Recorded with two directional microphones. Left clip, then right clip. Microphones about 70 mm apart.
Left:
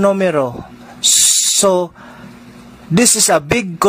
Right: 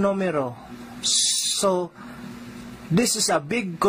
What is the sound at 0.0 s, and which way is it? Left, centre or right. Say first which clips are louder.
Speech: left 10 dB; left.